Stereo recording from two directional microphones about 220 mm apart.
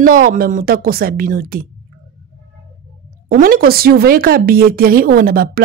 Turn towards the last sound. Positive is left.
turn(degrees=-40)  # may be behind; listen again after turning